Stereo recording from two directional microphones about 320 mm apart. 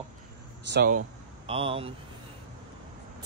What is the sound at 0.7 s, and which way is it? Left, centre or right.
Speech, right.